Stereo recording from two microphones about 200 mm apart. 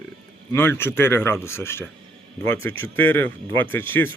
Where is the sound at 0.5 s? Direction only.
10° left (ahead or behind).